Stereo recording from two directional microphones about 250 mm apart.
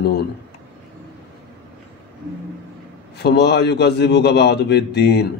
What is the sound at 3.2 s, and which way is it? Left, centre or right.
Speech, left.